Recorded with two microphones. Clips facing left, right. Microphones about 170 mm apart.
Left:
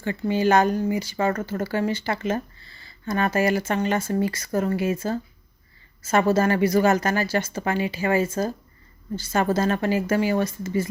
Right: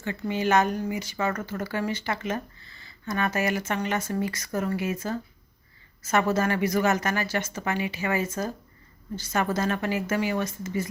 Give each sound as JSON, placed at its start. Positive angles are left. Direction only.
{"t": 0.0, "sound": "speech", "side_deg": 30}